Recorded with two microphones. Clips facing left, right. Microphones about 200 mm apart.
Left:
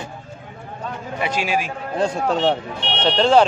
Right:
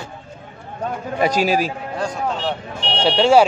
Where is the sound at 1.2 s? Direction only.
40° right (ahead or behind).